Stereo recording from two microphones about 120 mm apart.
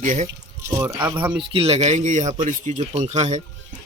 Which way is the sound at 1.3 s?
50° right (ahead or behind).